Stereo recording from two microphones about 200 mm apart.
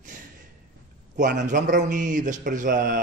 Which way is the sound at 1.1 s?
40° right (ahead or behind).